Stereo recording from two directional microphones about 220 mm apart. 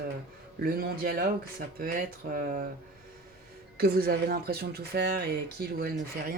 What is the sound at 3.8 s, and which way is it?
Speech, 45° right (ahead or behind).